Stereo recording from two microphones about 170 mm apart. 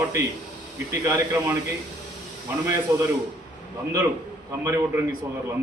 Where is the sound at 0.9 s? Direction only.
20° right (ahead or behind).